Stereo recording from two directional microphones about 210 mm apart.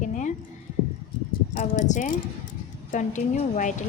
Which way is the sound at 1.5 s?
35° left (ahead or behind).